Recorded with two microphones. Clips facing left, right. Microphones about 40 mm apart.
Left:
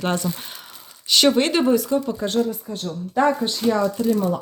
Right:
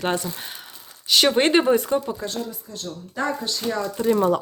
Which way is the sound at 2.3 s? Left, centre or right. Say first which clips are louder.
Left 9 dB; left.